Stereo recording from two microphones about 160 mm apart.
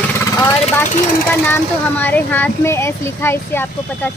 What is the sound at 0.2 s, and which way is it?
Vehicle, 20° left (ahead or behind).